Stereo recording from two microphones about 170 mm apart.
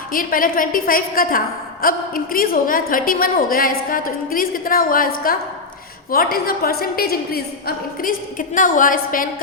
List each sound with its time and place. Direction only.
0.1 s a woman's voice: 55° left (ahead or behind)
8.0 s a woman's voice: 50° left (ahead or behind)